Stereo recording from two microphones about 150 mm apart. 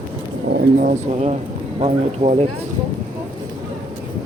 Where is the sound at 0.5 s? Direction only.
75° right (ahead or behind).